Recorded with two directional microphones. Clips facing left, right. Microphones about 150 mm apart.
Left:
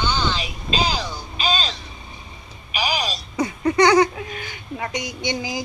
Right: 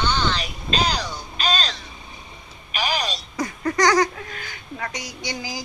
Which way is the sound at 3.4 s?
20° left (ahead or behind).